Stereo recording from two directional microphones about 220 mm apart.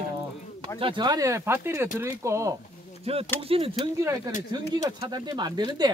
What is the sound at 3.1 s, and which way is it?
Speech, 25° right (ahead or behind).